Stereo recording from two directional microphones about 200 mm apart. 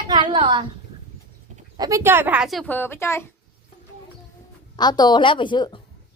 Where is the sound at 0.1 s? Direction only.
20° right (ahead or behind).